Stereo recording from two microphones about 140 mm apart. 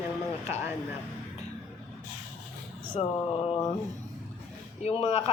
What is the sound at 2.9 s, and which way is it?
Speech, 45° left (ahead or behind).